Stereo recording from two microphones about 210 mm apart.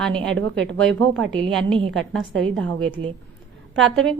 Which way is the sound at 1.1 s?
70° right (ahead or behind).